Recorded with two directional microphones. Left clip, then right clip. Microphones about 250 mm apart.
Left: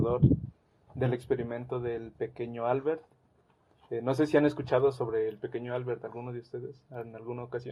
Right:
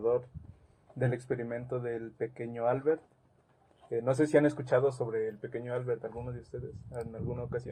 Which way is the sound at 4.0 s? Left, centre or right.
Centre.